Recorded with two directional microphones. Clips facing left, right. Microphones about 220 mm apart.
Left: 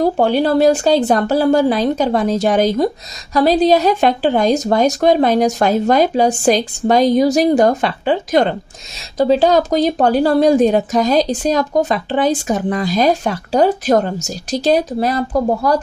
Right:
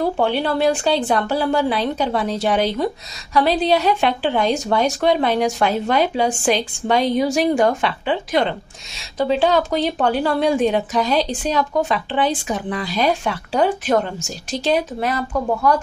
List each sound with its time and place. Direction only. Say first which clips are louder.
0.0 s speech: left 5 dB; 40° left (ahead or behind)